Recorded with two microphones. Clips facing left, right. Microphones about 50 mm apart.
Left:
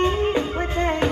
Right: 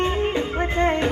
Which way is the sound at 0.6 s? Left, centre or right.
Centre.